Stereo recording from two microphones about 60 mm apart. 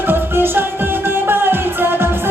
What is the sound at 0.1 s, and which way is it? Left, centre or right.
Music, right.